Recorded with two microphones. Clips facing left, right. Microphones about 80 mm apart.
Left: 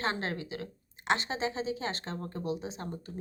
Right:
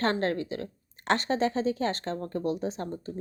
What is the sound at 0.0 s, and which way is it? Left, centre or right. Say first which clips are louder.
Speech: right 6 dB; right.